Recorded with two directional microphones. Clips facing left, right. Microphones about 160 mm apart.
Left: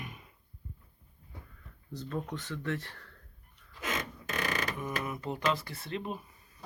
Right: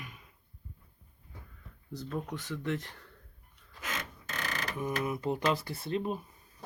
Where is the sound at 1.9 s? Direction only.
10° right (ahead or behind).